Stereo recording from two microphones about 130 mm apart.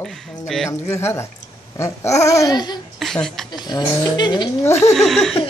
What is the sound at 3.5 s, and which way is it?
Speech, 35° left (ahead or behind).